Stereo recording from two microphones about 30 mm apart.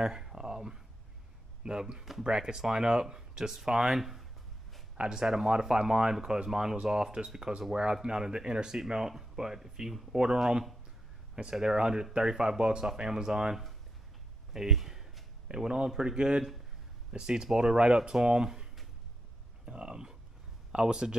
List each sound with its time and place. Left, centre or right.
0.0 s a sound: right
1.6 s speech: right
4.0 s speech: centre
5.1 s speech: centre
11.5 s speech: right
14.5 s a sound: centre
15.4 s speech: right
19.6 s speech: right
20.7 s speech: right